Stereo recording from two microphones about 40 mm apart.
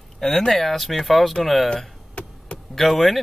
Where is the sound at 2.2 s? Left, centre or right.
Left.